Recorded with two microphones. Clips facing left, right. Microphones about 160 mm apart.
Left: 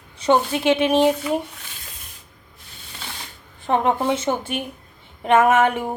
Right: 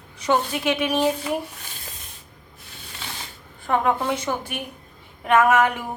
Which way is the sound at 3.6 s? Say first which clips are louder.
Left 2 dB; 25° left (ahead or behind).